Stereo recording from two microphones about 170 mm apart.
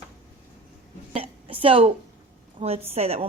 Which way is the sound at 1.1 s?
35° right (ahead or behind).